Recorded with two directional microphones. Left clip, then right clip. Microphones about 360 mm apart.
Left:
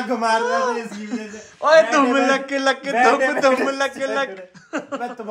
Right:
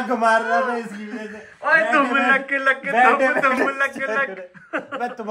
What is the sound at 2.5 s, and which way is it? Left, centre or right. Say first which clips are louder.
A man's voice: even; centre.